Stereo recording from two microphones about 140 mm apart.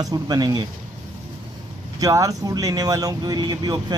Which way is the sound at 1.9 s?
25° right (ahead or behind).